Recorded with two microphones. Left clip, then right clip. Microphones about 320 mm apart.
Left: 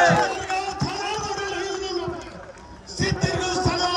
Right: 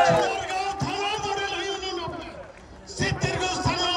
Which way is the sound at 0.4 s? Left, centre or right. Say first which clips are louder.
Left 1 dB; right.